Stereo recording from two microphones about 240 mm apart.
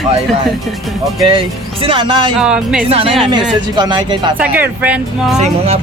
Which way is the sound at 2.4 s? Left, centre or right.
Centre.